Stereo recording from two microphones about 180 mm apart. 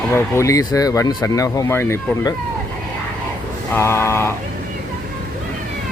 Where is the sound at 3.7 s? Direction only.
15° left (ahead or behind).